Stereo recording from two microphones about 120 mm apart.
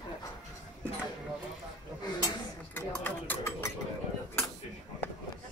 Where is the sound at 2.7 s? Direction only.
15° left (ahead or behind).